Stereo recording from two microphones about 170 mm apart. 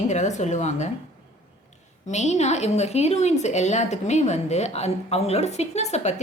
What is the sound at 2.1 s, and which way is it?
A woman's voice, 40° left (ahead or behind).